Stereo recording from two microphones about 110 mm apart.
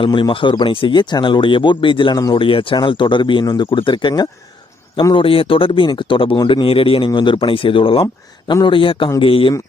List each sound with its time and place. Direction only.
0.0 s speech: 50° left (ahead or behind)
5.1 s speech: 55° left (ahead or behind)